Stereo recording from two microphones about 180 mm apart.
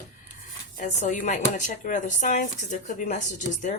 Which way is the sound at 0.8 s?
45° left (ahead or behind).